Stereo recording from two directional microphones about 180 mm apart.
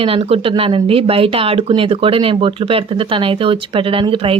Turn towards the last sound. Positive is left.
turn(degrees=-30)  # may be behind; listen again after turning